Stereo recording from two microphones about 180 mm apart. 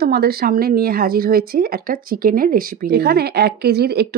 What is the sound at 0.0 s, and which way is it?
Speech, 60° right (ahead or behind).